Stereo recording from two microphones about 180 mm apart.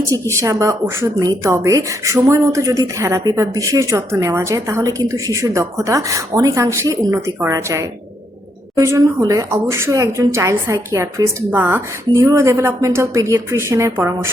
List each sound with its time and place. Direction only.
0.3 s a woman's voice: 20° right (ahead or behind)